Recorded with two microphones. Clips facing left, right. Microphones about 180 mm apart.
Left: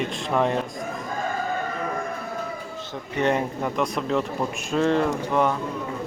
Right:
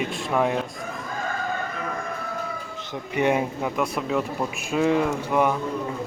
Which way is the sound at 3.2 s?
10° right (ahead or behind).